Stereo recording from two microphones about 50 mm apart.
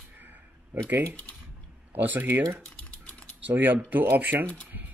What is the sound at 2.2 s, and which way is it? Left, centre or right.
Speech, right.